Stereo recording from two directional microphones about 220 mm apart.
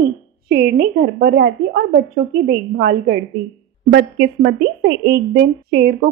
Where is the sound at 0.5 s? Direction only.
45° right (ahead or behind).